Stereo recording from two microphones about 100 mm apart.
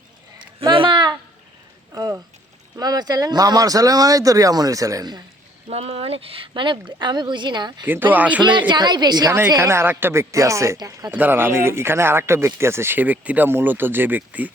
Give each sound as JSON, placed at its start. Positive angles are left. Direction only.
{"t": 0.7, "sound": "a sound", "side_deg": -60}
{"t": 1.9, "sound": "speech", "side_deg": -35}
{"t": 5.6, "sound": "speech", "side_deg": -80}
{"t": 7.9, "sound": "speech", "side_deg": -20}
{"t": 8.5, "sound": "a woman's voice", "side_deg": -50}
{"t": 9.6, "sound": "speech", "side_deg": -25}
{"t": 10.8, "sound": "speech", "side_deg": -40}
{"t": 11.1, "sound": "speech", "side_deg": -20}